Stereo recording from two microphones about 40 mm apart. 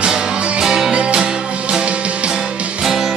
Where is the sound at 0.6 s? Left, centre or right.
Centre.